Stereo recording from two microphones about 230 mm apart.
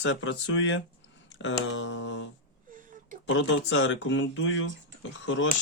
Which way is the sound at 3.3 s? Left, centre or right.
Left.